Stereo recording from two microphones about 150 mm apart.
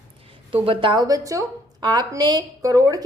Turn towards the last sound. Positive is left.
turn(degrees=-25)  # may be behind; listen again after turning